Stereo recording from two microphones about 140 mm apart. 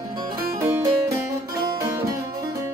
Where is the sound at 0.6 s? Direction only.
20° right (ahead or behind).